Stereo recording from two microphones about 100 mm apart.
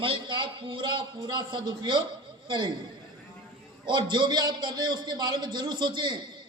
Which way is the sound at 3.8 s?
50° right (ahead or behind).